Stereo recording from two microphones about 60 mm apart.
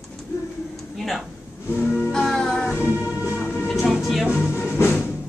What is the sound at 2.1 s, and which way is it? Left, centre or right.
Music, centre.